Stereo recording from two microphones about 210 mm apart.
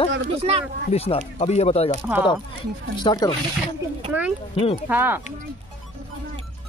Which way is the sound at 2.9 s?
20° left (ahead or behind).